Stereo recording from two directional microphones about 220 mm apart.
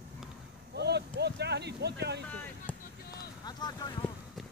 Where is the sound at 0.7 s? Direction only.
50° right (ahead or behind).